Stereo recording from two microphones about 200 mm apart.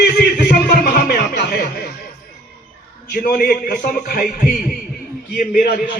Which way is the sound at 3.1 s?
50° left (ahead or behind).